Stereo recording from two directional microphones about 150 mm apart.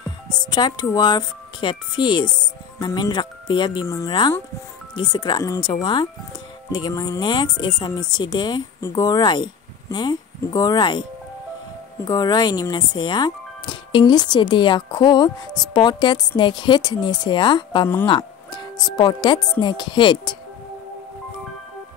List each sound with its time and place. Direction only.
0.3 s speech: 30° left (ahead or behind)
3.8 s speech: 20° left (ahead or behind)